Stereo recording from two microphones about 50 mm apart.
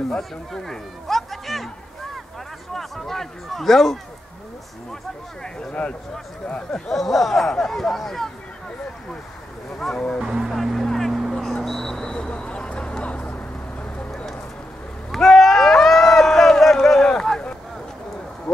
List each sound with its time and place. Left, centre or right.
0.2 s speech: centre
2.7 s speech: centre
5.4 s speech: centre
6.7 s speech: centre
9.8 s speech: centre
10.2 s speech: centre
10.5 s speech: centre
10.9 s music: centre
12.3 s vehicle: left
15.0 s a sound: centre